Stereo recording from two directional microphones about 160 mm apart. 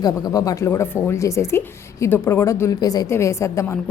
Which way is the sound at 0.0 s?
25° left (ahead or behind).